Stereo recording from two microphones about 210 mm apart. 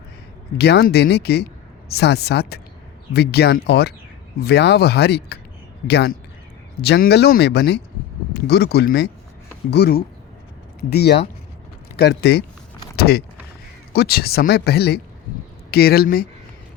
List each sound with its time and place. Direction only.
0.6 s speech: 50° left (ahead or behind)